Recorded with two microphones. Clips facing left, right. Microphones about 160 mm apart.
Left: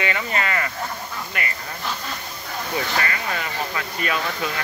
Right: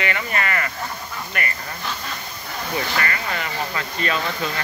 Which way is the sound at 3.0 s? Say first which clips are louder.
Right 1 dB; 10° left (ahead or behind).